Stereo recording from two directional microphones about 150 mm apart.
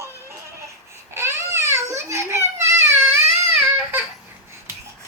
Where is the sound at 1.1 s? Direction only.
15° right (ahead or behind).